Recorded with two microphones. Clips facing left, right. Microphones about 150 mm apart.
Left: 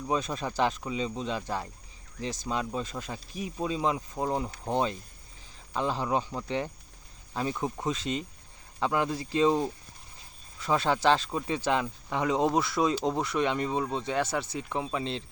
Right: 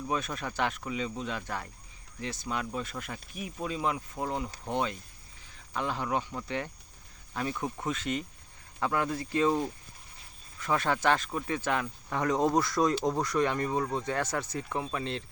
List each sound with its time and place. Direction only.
0.1 s speech: 25° left (ahead or behind)